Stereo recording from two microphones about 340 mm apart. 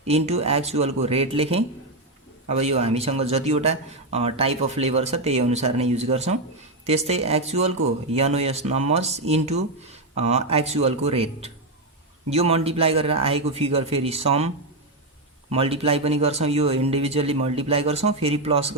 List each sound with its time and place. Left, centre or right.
0.0 s speech: centre